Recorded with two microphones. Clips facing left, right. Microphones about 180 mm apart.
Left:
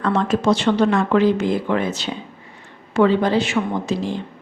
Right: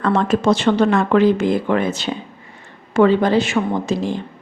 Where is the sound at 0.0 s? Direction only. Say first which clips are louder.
Right 2 dB; 50° right (ahead or behind).